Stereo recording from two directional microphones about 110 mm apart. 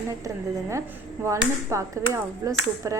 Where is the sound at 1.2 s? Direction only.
25° right (ahead or behind).